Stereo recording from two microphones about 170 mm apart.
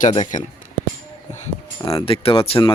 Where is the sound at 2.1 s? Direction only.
35° left (ahead or behind).